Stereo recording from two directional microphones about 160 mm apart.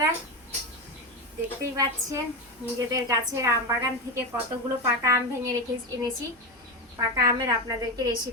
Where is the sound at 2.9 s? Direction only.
20° right (ahead or behind).